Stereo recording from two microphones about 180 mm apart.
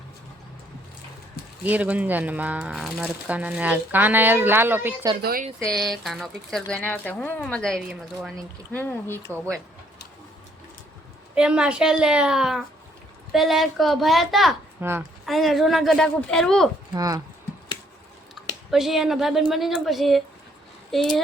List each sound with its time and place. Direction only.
1.6 s speech: 10° right (ahead or behind)
5.2 s speech: 55° right (ahead or behind)
5.6 s speech: centre (ahead or behind)
8.7 s speech: 10° left (ahead or behind)
11.3 s speech: 5° right (ahead or behind)
14.8 s a woman's voice: 10° right (ahead or behind)
15.3 s speech: centre (ahead or behind)
16.9 s speech: 20° right (ahead or behind)
18.4 s a sound: centre (ahead or behind)
18.7 s speech: centre (ahead or behind)